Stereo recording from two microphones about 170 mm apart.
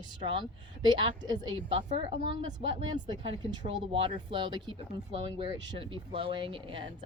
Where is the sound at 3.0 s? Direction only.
30° right (ahead or behind).